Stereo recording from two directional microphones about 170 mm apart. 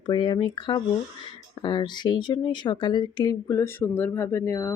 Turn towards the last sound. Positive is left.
turn(degrees=15)  # may be behind; listen again after turning